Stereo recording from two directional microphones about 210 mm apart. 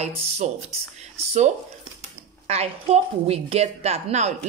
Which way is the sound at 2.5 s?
30° right (ahead or behind).